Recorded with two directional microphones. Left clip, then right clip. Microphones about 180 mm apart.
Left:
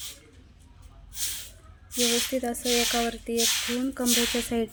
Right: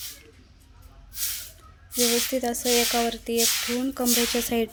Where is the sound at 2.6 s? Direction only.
30° right (ahead or behind).